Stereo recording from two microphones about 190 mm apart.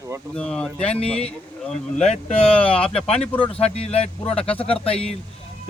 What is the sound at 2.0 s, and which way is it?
Speech, 35° left (ahead or behind).